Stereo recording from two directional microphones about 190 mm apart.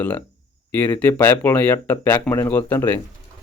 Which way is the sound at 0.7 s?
10° left (ahead or behind).